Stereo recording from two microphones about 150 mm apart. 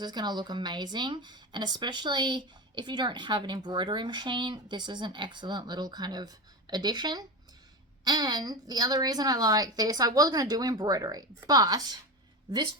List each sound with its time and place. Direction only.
0.0 s a woman's voice: 30° right (ahead or behind)